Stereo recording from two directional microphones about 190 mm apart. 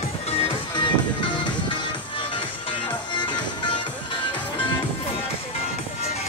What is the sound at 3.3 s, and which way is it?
Music, 25° left (ahead or behind).